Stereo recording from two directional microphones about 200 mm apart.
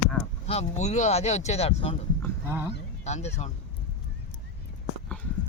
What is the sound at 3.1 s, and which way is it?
Speech, 35° left (ahead or behind).